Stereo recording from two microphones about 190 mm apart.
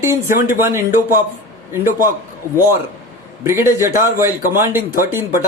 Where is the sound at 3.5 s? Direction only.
15° right (ahead or behind).